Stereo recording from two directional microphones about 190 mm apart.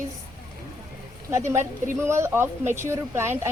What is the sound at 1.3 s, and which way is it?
Speech, 15° right (ahead or behind).